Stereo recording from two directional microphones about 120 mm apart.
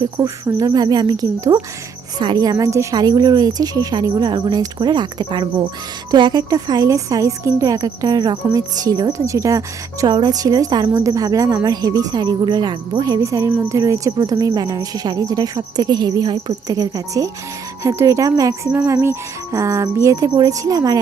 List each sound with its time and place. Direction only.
0.2 s a woman's voice: 30° right (ahead or behind)
17.8 s cricket: 25° right (ahead or behind)
20.3 s a woman's voice: 30° right (ahead or behind)